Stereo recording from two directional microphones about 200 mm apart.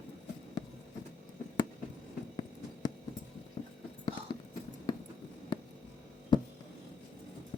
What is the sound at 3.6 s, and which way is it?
Clip-clop, 25° left (ahead or behind).